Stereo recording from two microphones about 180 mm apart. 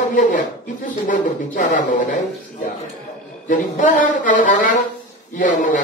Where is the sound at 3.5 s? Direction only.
45° left (ahead or behind).